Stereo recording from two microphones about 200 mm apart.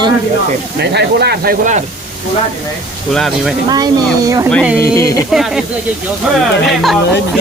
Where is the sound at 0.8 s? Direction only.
55° right (ahead or behind).